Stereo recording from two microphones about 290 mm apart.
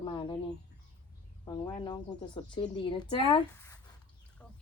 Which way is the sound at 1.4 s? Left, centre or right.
Centre.